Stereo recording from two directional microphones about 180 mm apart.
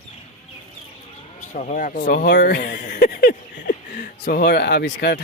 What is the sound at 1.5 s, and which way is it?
Speech, 45° left (ahead or behind).